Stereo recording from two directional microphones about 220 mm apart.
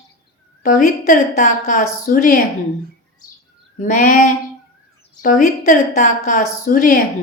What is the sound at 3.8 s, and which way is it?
A woman's voice, 35° left (ahead or behind).